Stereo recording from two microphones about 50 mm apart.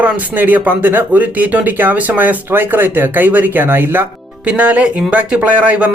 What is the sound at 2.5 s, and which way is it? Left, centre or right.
Speech, right.